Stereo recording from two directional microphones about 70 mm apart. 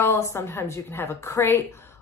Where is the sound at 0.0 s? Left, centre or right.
Left.